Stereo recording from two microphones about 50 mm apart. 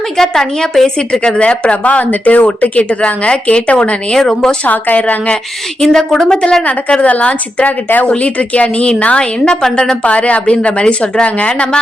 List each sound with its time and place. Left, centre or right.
0.2 s speech: centre
0.9 s speech: centre
4.6 s a woman's voice: left
5.8 s speech: centre
6.7 s a woman's voice: left
9.4 s speech: centre